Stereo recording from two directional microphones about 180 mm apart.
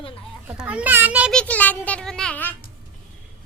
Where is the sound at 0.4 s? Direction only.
5° right (ahead or behind).